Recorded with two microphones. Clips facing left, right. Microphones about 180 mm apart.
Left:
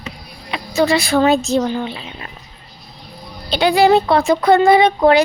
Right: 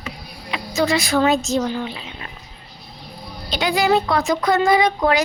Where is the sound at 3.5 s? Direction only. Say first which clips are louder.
Left 6 dB; 30° left (ahead or behind).